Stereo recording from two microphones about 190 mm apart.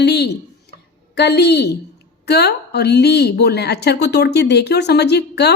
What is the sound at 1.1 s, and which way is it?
A woman's voice, 60° left (ahead or behind).